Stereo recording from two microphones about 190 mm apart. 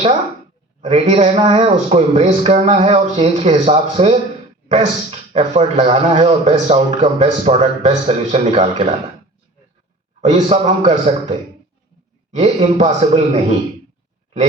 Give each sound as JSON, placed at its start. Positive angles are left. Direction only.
{"t": 0.8, "sound": "speech", "side_deg": -35}
{"t": 10.2, "sound": "speech", "side_deg": -40}